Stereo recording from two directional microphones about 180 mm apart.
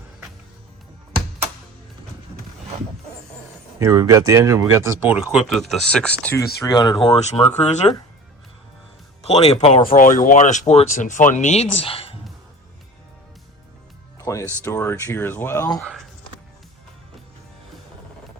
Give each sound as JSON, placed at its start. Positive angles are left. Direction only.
{"t": 3.8, "sound": "speech", "side_deg": -15}
{"t": 6.7, "sound": "speech", "side_deg": 20}
{"t": 7.2, "sound": "speech", "side_deg": 35}
{"t": 9.2, "sound": "speech", "side_deg": 35}
{"t": 9.8, "sound": "speech", "side_deg": 50}
{"t": 14.2, "sound": "speech", "side_deg": 15}